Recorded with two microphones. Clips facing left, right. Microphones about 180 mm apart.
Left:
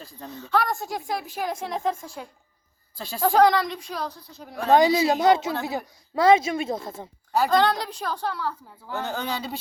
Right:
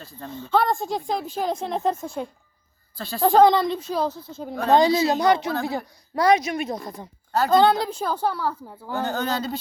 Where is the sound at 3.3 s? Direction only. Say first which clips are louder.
Right 3 dB; 25° right (ahead or behind).